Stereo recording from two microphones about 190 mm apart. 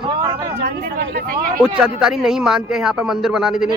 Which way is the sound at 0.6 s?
55° right (ahead or behind).